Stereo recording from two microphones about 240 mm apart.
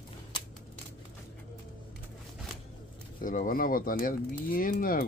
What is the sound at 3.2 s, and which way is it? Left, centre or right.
Speech, left.